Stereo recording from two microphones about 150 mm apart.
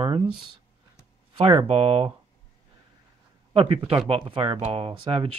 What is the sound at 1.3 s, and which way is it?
Speech, 35° right (ahead or behind).